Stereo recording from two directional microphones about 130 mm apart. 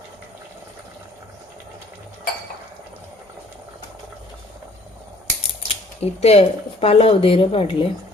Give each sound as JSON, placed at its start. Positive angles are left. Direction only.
{"t": 5.6, "sound": "speech", "side_deg": 55}